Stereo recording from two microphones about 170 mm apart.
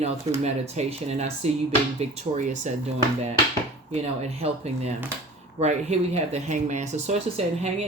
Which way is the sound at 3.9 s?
40° right (ahead or behind).